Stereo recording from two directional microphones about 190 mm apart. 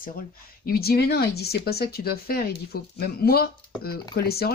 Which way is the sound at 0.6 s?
55° left (ahead or behind).